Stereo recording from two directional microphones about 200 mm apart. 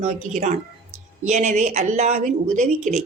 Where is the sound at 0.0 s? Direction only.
35° right (ahead or behind).